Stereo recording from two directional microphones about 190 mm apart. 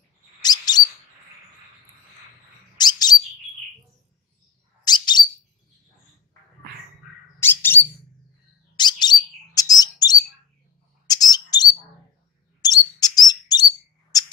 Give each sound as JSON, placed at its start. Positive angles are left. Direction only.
{"t": 0.4, "sound": "a sound", "side_deg": 20}
{"t": 2.8, "sound": "bird", "side_deg": 20}
{"t": 4.8, "sound": "bird", "side_deg": 25}
{"t": 7.3, "sound": "bird", "side_deg": 10}
{"t": 8.7, "sound": "bird", "side_deg": 20}
{"t": 12.6, "sound": "chirp", "side_deg": 20}